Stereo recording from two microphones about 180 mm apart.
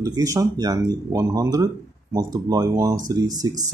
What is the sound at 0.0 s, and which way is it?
Speech, 20° right (ahead or behind).